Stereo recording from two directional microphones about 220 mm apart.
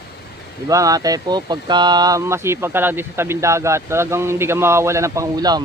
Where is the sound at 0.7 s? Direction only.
15° right (ahead or behind).